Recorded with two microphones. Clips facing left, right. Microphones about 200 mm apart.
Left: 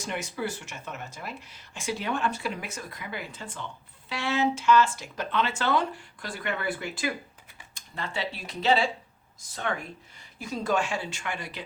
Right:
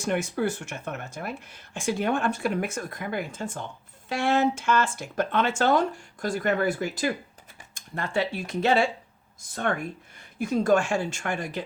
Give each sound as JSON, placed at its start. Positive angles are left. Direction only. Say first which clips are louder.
{"t": 0.0, "sound": "speech", "louder": "right 6 dB", "side_deg": -55}